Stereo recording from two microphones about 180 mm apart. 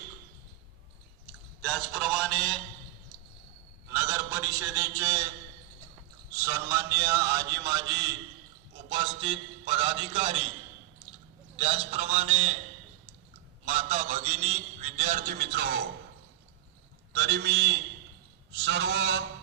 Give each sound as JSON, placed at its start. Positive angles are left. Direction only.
{"t": 1.6, "sound": "a sound", "side_deg": 0}
{"t": 3.9, "sound": "a sound", "side_deg": -10}
{"t": 6.3, "sound": "a man's voice", "side_deg": -15}
{"t": 9.2, "sound": "a man's voice", "side_deg": -30}
{"t": 11.5, "sound": "a man's voice", "side_deg": -35}
{"t": 13.7, "sound": "a man's voice", "side_deg": -35}
{"t": 17.2, "sound": "a man's voice", "side_deg": -70}